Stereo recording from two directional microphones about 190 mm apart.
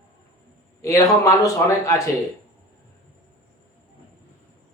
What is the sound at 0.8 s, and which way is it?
Speech, 15° left (ahead or behind).